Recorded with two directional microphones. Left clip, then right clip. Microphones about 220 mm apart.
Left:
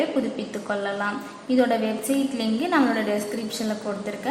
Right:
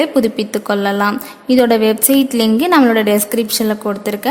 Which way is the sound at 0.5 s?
50° right (ahead or behind).